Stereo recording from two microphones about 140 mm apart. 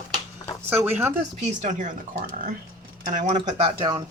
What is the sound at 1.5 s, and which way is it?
Speech, 60° right (ahead or behind).